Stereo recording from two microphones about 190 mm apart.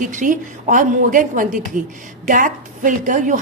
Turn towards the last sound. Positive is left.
turn(degrees=-45)  # may be behind; listen again after turning